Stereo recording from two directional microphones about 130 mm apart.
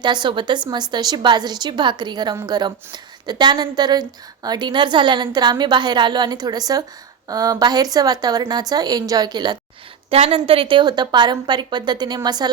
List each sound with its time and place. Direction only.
0.0 s a woman's voice: 35° right (ahead or behind)
10.1 s a woman's voice: 50° right (ahead or behind); by 12.5 s 35° right (ahead or behind)